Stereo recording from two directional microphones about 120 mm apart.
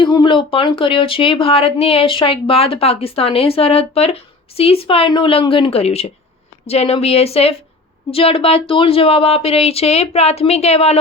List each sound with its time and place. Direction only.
0.0 s speech: 40° left (ahead or behind); by 11.0 s 60° left (ahead or behind)